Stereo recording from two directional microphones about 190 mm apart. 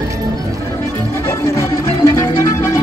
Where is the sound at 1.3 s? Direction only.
15° left (ahead or behind).